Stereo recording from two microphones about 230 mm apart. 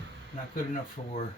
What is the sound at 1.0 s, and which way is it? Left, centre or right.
Speech, left.